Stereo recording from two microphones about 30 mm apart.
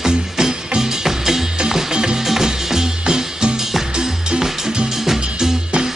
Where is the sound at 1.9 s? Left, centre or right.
Right.